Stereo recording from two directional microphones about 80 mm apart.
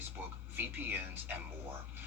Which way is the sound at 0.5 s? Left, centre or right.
Right.